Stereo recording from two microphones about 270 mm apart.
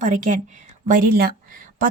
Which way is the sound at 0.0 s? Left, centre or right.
Right.